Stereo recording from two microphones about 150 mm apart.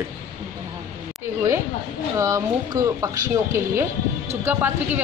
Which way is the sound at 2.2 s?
20° right (ahead or behind).